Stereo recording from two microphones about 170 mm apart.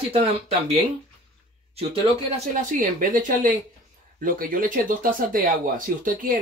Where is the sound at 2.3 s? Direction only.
50° right (ahead or behind).